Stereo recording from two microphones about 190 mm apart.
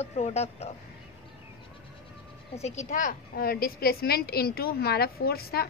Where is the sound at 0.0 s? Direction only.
35° left (ahead or behind).